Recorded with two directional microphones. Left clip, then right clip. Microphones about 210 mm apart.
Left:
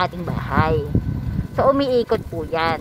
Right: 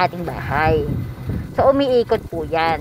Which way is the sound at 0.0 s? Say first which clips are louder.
Right 3 dB; 5° left (ahead or behind).